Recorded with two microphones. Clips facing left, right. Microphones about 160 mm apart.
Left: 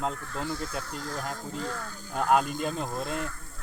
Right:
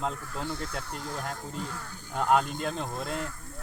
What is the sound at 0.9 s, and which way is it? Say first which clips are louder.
Speech: left 1 dB; centre (ahead or behind).